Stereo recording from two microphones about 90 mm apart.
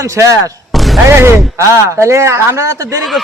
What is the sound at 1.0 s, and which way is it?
A man's voice, 30° right (ahead or behind).